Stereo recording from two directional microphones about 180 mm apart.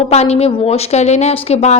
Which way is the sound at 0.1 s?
35° left (ahead or behind).